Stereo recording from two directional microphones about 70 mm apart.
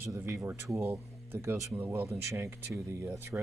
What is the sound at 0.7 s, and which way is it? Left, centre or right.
Speech, right.